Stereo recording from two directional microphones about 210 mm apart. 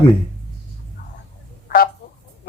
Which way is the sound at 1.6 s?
45° left (ahead or behind).